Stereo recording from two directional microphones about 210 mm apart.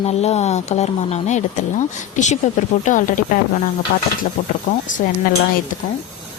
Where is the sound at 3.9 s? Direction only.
50° left (ahead or behind).